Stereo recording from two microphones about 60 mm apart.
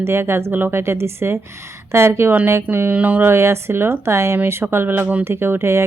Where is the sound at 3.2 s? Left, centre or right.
Right.